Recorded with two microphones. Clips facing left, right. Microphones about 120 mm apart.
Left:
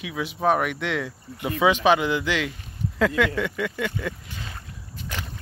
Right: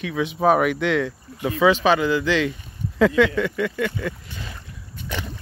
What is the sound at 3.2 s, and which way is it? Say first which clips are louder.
Speech: right 3 dB; 10° left (ahead or behind).